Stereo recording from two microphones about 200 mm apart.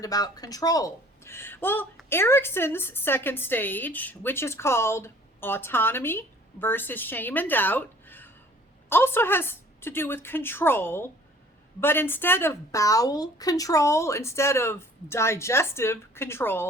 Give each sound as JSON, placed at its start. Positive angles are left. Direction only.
{"t": 0.0, "sound": "a woman's voice", "side_deg": 20}